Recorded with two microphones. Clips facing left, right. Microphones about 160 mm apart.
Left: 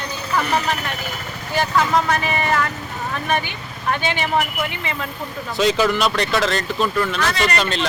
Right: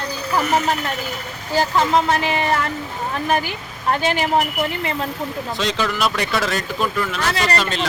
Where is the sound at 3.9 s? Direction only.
35° right (ahead or behind).